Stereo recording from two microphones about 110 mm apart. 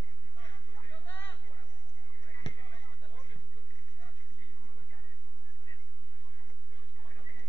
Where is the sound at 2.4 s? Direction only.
50° left (ahead or behind).